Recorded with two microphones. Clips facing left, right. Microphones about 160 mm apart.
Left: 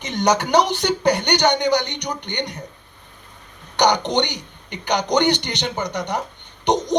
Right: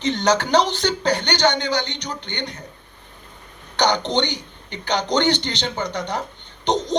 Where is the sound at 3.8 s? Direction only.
15° left (ahead or behind).